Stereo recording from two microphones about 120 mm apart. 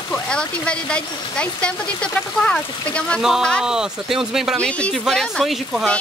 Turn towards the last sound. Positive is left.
turn(degrees=0)  # may be behind; listen again after turning